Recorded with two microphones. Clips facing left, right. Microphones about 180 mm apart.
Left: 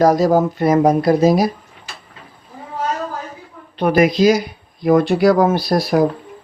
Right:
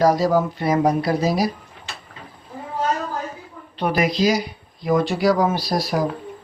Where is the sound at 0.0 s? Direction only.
45° left (ahead or behind).